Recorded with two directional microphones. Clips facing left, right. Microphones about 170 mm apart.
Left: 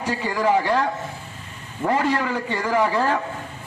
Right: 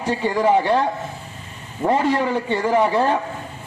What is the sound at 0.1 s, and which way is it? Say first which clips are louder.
A man's voice: right 3 dB; 20° right (ahead or behind).